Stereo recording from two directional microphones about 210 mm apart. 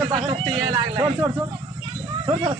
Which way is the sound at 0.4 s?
25° right (ahead or behind).